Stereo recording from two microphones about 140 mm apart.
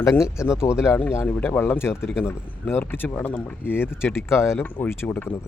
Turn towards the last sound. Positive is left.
turn(degrees=15)  # may be behind; listen again after turning